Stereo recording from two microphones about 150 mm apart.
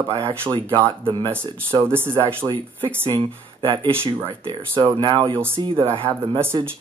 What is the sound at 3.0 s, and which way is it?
Speech, 35° right (ahead or behind).